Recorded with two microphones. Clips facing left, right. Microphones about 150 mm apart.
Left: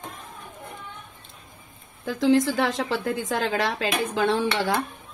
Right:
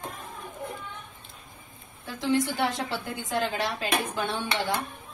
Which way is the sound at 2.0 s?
90° left.